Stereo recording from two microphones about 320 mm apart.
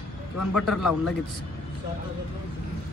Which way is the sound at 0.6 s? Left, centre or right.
Centre.